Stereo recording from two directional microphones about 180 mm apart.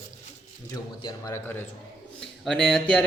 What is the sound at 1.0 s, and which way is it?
Speech, 25° left (ahead or behind).